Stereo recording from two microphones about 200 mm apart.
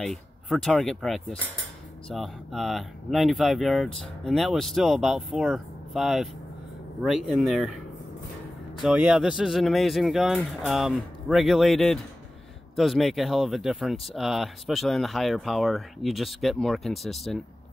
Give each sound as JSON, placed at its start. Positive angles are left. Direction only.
{"t": 0.0, "sound": "speech", "side_deg": 0}
{"t": 8.8, "sound": "speech", "side_deg": -5}